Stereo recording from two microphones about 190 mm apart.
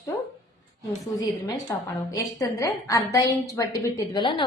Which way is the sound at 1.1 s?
20° left (ahead or behind).